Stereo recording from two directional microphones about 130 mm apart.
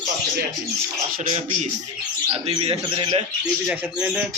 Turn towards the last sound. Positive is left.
turn(degrees=-10)  # may be behind; listen again after turning